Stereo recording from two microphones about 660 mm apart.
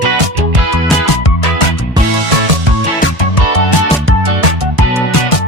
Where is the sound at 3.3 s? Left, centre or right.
Left.